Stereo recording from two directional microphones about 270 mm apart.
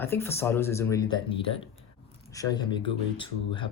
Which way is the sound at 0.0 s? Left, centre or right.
Centre.